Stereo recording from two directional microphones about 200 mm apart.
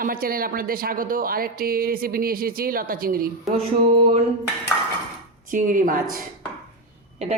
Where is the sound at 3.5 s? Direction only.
30° right (ahead or behind).